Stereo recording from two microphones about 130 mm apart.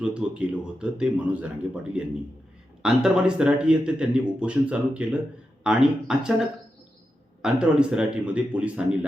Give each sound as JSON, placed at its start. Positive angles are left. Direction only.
{"t": 0.0, "sound": "speech", "side_deg": -10}
{"t": 7.4, "sound": "speech", "side_deg": -5}